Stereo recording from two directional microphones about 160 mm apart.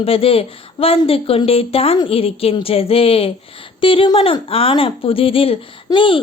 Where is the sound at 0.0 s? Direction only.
35° left (ahead or behind).